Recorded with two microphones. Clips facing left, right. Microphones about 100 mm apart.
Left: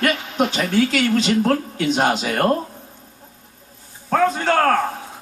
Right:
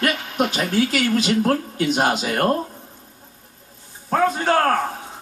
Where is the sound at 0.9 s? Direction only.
5° right (ahead or behind).